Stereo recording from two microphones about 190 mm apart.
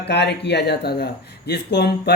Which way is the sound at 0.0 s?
60° left (ahead or behind).